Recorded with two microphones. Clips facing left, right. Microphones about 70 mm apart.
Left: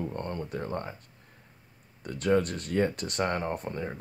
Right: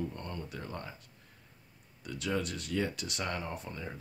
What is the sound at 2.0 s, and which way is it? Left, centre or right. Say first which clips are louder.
Speech: left 9 dB; left.